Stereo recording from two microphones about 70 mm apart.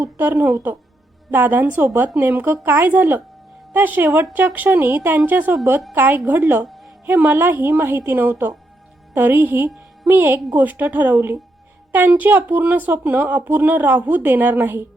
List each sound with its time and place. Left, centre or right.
0.0 s speech: right